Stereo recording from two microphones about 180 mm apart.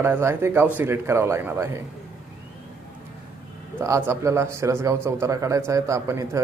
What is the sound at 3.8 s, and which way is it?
A man's voice, 15° right (ahead or behind).